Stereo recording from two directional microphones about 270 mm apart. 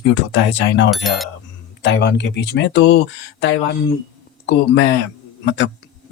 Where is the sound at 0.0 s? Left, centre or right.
Left.